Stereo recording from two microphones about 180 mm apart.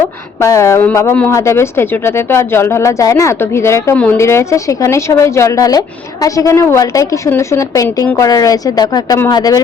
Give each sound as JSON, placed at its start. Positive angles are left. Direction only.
{"t": 0.4, "sound": "a woman's voice", "side_deg": 15}